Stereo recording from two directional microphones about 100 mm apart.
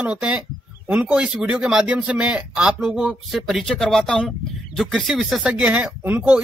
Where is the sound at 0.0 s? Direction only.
15° right (ahead or behind).